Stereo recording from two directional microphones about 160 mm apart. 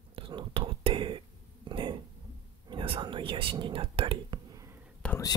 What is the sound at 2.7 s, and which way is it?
Speech, 30° right (ahead or behind).